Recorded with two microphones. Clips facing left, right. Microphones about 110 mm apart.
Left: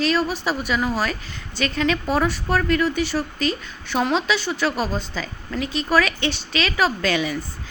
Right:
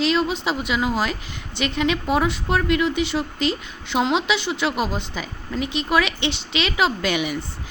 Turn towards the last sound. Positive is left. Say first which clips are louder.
# left 1 dB
turn(degrees=-15)  # may be behind; listen again after turning